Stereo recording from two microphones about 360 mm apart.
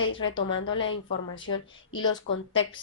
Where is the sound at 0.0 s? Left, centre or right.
Left.